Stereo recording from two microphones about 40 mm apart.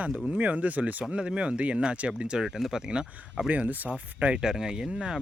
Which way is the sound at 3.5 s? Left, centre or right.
Right.